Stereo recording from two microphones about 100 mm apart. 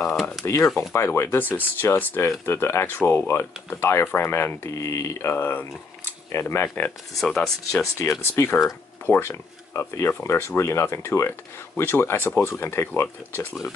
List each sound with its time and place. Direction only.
0.1 s speech: centre (ahead or behind)
0.7 s speech: 25° left (ahead or behind)
5.3 s speech: 20° left (ahead or behind)
7.2 s speech: 5° left (ahead or behind)
7.7 s speech: 30° left (ahead or behind)